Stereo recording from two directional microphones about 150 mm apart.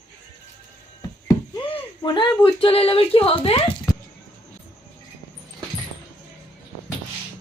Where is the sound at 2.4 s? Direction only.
40° left (ahead or behind).